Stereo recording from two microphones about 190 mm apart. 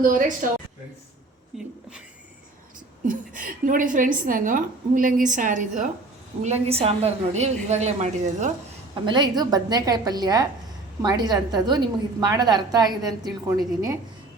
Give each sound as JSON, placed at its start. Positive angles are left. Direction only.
{"t": 0.0, "sound": "a woman's voice", "side_deg": -45}
{"t": 1.5, "sound": "speech", "side_deg": 0}
{"t": 3.1, "sound": "a woman's voice", "side_deg": -45}
{"t": 9.0, "sound": "a woman's voice", "side_deg": -25}